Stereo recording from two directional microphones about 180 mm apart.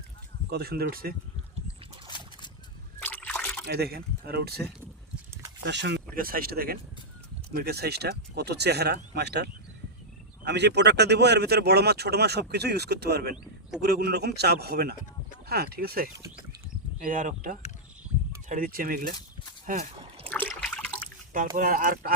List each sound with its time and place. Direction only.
0.5 s speech: 60° right (ahead or behind)
2.0 s a sound: 25° left (ahead or behind)
3.0 s trickle: 10° left (ahead or behind)
3.7 s speech: 60° right (ahead or behind)
5.6 s speech: 75° right (ahead or behind)
13.3 s a man's voice: 5° right (ahead or behind)
13.8 s speech: 65° right (ahead or behind)
17.0 s speech: 45° right (ahead or behind)
19.6 s speech: 40° right (ahead or behind)
20.0 s splash: 30° right (ahead or behind)
20.3 s water: 5° left (ahead or behind)
21.3 s speech: 45° right (ahead or behind)